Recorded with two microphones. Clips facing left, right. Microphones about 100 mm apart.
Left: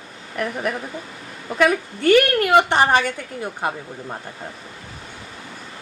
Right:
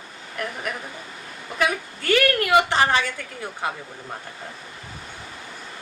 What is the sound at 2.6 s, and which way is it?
Speech, 50° left (ahead or behind).